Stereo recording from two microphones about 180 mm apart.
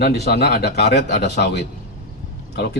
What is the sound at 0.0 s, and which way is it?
A man's voice, 65° left (ahead or behind).